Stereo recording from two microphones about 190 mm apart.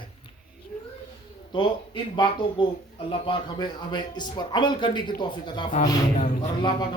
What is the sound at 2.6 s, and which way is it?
A man's voice, 25° left (ahead or behind).